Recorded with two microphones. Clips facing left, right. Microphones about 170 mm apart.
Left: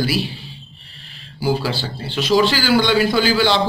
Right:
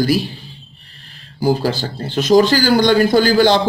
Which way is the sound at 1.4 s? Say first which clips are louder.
Right 4 dB; 45° right (ahead or behind).